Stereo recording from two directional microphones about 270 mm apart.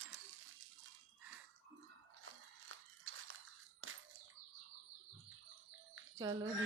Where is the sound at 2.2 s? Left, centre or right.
Right.